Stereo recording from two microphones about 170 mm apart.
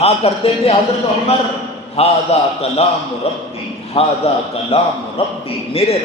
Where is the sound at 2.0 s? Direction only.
35° left (ahead or behind).